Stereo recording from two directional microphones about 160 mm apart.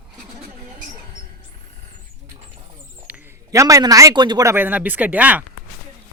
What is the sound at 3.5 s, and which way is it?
Speech, 20° right (ahead or behind).